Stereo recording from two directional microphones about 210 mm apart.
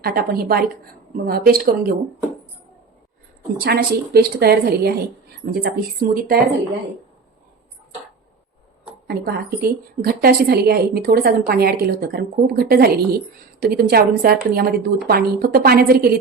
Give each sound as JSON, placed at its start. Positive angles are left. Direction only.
{"t": 0.0, "sound": "a woman's voice", "side_deg": -45}
{"t": 3.6, "sound": "a woman's voice", "side_deg": -50}
{"t": 9.0, "sound": "a woman's voice", "side_deg": -45}